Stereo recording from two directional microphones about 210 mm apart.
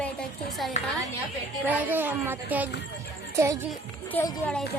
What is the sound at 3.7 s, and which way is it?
Speech, 10° left (ahead or behind).